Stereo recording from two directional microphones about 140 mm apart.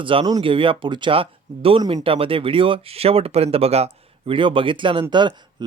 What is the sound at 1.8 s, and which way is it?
Speech, 25° right (ahead or behind).